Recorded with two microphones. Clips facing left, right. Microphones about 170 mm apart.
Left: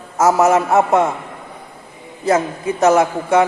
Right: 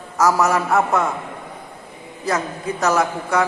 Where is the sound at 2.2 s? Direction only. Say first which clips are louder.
Left 6 dB; 25° left (ahead or behind).